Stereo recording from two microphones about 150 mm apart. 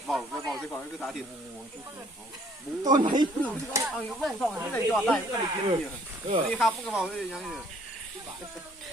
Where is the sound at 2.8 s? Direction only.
30° right (ahead or behind).